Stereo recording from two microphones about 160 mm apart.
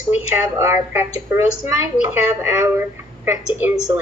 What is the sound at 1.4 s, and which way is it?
Speech, 15° right (ahead or behind).